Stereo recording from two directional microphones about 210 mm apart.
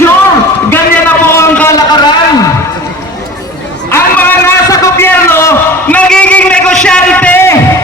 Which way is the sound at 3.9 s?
10° left (ahead or behind).